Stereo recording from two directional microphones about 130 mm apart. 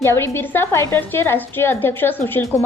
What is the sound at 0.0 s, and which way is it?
A woman's voice, 20° left (ahead or behind).